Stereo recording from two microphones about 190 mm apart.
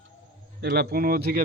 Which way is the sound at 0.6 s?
60° right (ahead or behind).